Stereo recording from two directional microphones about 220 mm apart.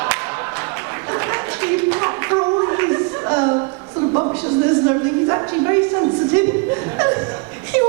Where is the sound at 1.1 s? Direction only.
15° right (ahead or behind).